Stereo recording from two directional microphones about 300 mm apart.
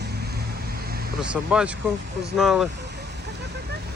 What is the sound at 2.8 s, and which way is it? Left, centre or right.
Vehicle, right.